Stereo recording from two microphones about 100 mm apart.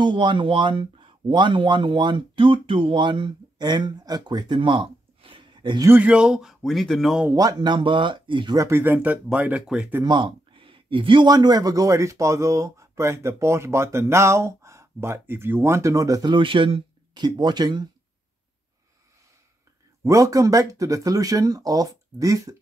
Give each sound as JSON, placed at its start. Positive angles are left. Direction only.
{"t": 0.0, "sound": "speech", "side_deg": -50}
{"t": 5.9, "sound": "speech", "side_deg": -15}
{"t": 7.2, "sound": "speech", "side_deg": -35}
{"t": 7.5, "sound": "speech", "side_deg": -50}
{"t": 8.5, "sound": "speech", "side_deg": -25}
{"t": 10.0, "sound": "a sound", "side_deg": -60}
{"t": 11.2, "sound": "a man's voice", "side_deg": -40}
{"t": 16.3, "sound": "speech", "side_deg": -60}
{"t": 20.0, "sound": "speech", "side_deg": -30}